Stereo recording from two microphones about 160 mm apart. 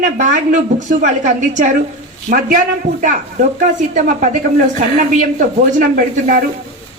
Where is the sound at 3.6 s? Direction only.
50° right (ahead or behind).